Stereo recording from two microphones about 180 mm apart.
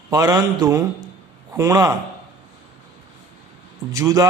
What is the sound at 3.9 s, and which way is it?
Speech, 20° right (ahead or behind).